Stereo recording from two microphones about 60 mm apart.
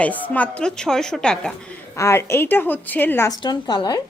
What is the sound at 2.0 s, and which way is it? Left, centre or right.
Speech, left.